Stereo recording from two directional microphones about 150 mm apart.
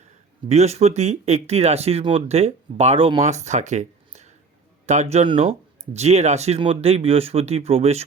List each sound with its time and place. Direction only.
0.4 s speech: 45° right (ahead or behind)